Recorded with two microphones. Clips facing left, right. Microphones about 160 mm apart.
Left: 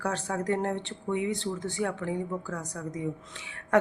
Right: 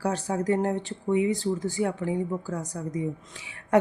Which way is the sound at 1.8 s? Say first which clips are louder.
Right 1 dB; 20° right (ahead or behind).